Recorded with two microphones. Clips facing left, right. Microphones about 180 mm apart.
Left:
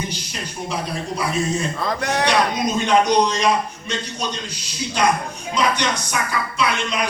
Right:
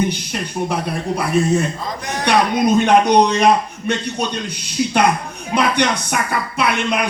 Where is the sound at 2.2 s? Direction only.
60° right (ahead or behind).